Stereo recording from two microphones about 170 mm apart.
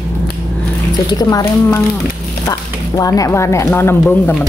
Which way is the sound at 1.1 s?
20° left (ahead or behind).